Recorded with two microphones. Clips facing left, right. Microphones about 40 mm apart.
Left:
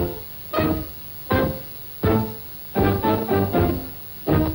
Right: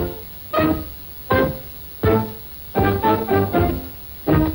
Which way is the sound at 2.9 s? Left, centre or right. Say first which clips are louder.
Right 3 dB; centre.